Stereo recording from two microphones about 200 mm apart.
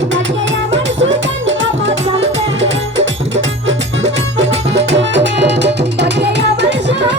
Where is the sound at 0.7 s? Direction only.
70° right (ahead or behind).